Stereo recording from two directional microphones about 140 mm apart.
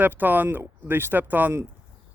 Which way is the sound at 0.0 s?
15° right (ahead or behind).